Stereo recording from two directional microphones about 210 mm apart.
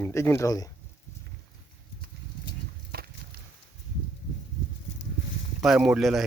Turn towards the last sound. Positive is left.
turn(degrees=0)  # may be behind; listen again after turning